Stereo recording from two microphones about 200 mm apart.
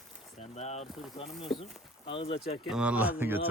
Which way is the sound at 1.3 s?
Centre (ahead or behind).